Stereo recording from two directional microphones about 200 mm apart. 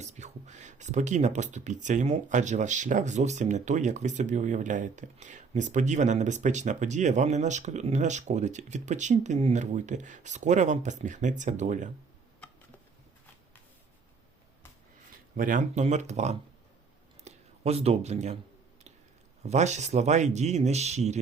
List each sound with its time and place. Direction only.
0.0 s speech: 35° right (ahead or behind)
15.4 s speech: 40° right (ahead or behind)
19.4 s speech: 35° right (ahead or behind)